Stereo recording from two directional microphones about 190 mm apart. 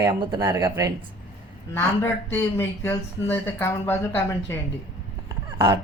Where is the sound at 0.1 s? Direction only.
25° right (ahead or behind).